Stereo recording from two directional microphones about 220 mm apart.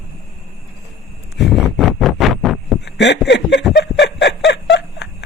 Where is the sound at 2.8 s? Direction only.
50° left (ahead or behind).